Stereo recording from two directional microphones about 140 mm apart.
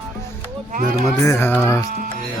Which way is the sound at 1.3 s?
15° left (ahead or behind).